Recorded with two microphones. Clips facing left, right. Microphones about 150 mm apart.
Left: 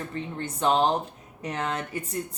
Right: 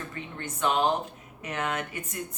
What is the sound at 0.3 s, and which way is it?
Speech, 30° left (ahead or behind).